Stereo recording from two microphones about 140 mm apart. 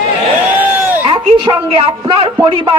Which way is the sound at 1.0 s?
40° right (ahead or behind).